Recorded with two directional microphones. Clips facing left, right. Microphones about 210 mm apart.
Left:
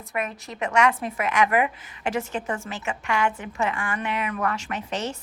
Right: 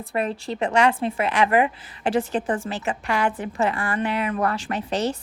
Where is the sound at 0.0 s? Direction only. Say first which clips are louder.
Right 5 dB; 30° right (ahead or behind).